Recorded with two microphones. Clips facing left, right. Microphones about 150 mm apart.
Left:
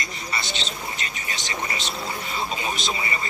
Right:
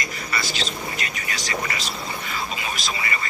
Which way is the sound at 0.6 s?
25° left (ahead or behind).